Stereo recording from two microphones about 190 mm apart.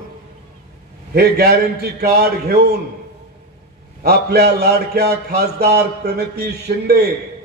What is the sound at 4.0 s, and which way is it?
A man's voice, 55° right (ahead or behind).